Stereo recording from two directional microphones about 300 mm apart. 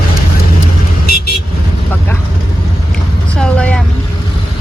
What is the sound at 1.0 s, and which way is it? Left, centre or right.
Vehicle, left.